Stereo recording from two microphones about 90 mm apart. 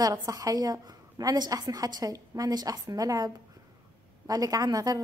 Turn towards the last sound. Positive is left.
turn(degrees=-45)  # may be behind; listen again after turning